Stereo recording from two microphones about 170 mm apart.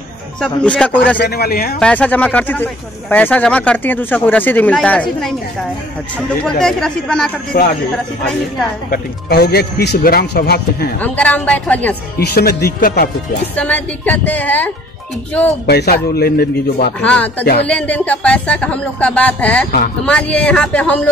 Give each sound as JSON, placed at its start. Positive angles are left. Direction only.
{"t": 0.4, "sound": "speech", "side_deg": 5}
{"t": 1.2, "sound": "speech", "side_deg": 65}
{"t": 1.8, "sound": "speech", "side_deg": 10}
{"t": 6.4, "sound": "speech", "side_deg": 5}
{"t": 7.5, "sound": "speech", "side_deg": 65}
{"t": 8.9, "sound": "speech", "side_deg": 70}
{"t": 11.0, "sound": "speech", "side_deg": 10}
{"t": 12.2, "sound": "speech", "side_deg": 70}
{"t": 13.6, "sound": "speech", "side_deg": 10}
{"t": 15.6, "sound": "speech", "side_deg": 70}
{"t": 17.0, "sound": "speech", "side_deg": 10}